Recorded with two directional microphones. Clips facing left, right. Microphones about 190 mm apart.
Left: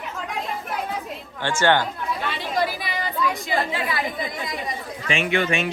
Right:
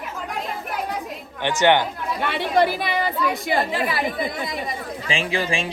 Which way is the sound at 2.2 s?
60° right (ahead or behind).